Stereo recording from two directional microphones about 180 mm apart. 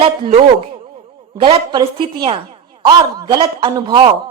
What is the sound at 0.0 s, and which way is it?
A man's voice, 30° right (ahead or behind).